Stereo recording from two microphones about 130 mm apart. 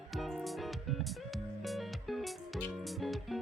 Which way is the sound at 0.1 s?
Centre (ahead or behind).